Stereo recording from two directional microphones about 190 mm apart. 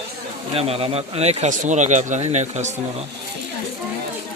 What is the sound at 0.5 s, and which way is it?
Speech, 30° right (ahead or behind).